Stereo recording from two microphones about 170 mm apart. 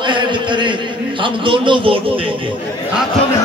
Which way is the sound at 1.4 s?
30° right (ahead or behind).